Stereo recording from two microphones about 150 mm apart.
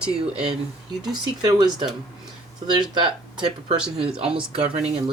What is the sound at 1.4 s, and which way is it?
Speech, 30° right (ahead or behind).